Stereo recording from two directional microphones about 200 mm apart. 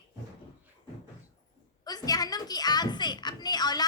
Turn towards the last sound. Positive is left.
turn(degrees=20)  # may be behind; listen again after turning